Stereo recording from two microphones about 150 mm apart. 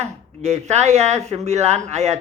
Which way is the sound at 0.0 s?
45° right (ahead or behind).